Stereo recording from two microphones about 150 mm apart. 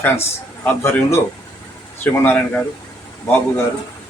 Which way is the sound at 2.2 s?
15° left (ahead or behind).